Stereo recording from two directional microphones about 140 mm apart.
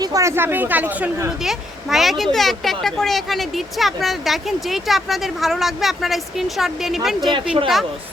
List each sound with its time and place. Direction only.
0.0 s speech: 25° right (ahead or behind); by 7.3 s centre (ahead or behind)
7.3 s speech: 40° right (ahead or behind)